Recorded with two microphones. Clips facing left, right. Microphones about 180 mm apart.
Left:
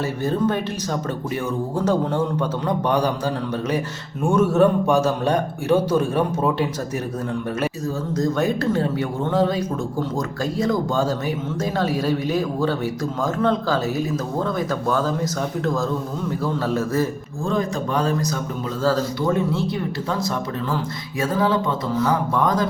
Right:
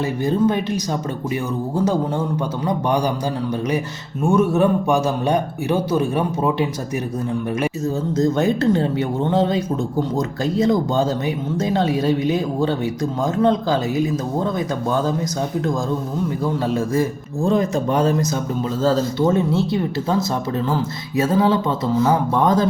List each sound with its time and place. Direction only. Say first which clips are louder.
0.3 s speech: right 3 dB; 15° right (ahead or behind)
1.7 s speech: right 1 dB; 10° right (ahead or behind)
4.4 s speech: left 1 dB; 10° right (ahead or behind)
8.1 s speech: right 3 dB; 25° right (ahead or behind)